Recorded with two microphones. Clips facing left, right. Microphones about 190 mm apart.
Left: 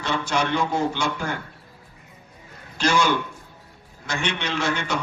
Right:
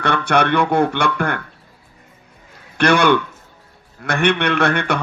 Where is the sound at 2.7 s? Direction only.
60° right (ahead or behind).